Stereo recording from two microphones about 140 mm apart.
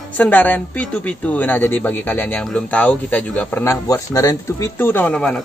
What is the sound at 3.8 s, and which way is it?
Speech, 25° left (ahead or behind).